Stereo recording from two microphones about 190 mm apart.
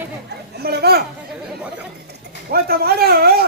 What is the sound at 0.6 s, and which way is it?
Speech, 55° right (ahead or behind).